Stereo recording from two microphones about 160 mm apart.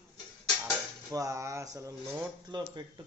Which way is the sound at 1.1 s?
20° right (ahead or behind).